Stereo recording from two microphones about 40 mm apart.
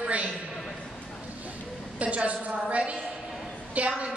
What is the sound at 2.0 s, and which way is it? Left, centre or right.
A woman's voice, right.